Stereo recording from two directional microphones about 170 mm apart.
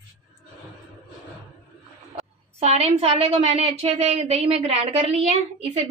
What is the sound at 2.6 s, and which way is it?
A woman's voice, 35° right (ahead or behind).